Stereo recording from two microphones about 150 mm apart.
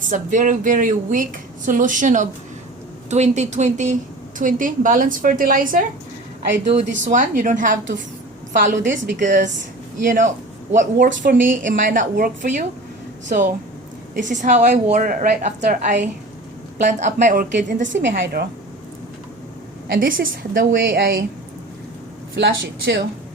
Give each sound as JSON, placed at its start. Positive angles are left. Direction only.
{"t": 0.0, "sound": "a man's voice", "side_deg": -55}
{"t": 10.9, "sound": "speech", "side_deg": -65}
{"t": 14.9, "sound": "speech", "side_deg": -65}
{"t": 19.9, "sound": "a woman's voice", "side_deg": -75}